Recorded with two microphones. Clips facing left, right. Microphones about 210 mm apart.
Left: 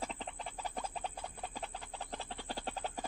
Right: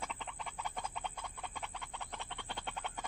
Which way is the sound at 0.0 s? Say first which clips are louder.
Left 3 dB; 35° left (ahead or behind).